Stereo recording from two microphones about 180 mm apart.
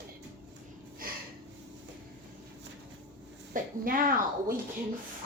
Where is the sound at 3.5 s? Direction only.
50° right (ahead or behind).